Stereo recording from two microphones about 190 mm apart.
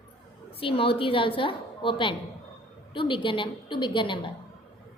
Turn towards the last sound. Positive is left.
turn(degrees=25)  # may be behind; listen again after turning